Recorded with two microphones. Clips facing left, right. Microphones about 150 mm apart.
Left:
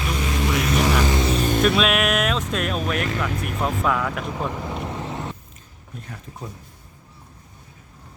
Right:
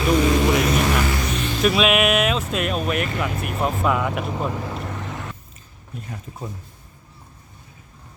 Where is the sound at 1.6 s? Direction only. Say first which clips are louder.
Right 5 dB; 5° right (ahead or behind).